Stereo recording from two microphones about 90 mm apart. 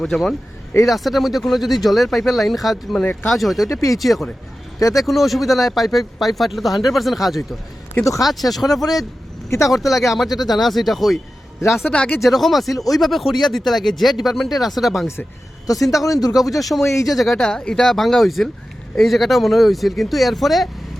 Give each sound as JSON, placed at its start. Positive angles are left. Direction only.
{"t": 0.0, "sound": "speech", "side_deg": 5}
{"t": 3.7, "sound": "speech", "side_deg": 35}
{"t": 3.9, "sound": "speech", "side_deg": 0}
{"t": 8.8, "sound": "speech", "side_deg": 45}
{"t": 9.6, "sound": "speech", "side_deg": 0}
{"t": 10.3, "sound": "speech", "side_deg": 50}
{"t": 10.6, "sound": "speech", "side_deg": 0}
{"t": 11.9, "sound": "speech", "side_deg": 15}
{"t": 12.2, "sound": "speech", "side_deg": 0}
{"t": 15.6, "sound": "speech", "side_deg": 40}
{"t": 16.6, "sound": "speech", "side_deg": 0}